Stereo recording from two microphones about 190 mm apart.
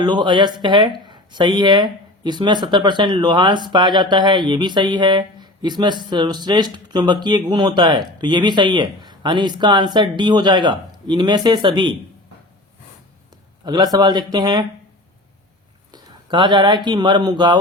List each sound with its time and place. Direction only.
0.0 s speech: 25° right (ahead or behind)
13.7 s speech: 20° right (ahead or behind)
15.9 s speech: 25° right (ahead or behind)